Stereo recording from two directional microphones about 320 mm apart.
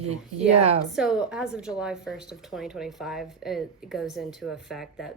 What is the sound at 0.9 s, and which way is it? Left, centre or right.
A woman's voice, centre.